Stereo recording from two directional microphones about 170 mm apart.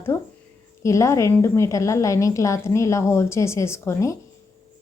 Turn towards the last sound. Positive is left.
turn(degrees=15)  # may be behind; listen again after turning